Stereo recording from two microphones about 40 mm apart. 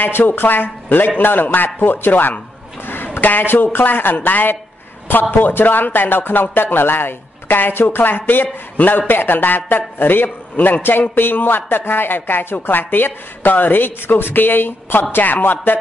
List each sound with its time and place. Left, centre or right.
0.3 s a man's voice: left